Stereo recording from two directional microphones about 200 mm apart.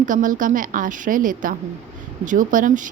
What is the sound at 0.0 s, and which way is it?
Speech, 40° right (ahead or behind).